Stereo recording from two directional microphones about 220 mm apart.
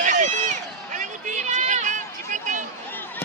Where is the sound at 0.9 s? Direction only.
35° right (ahead or behind).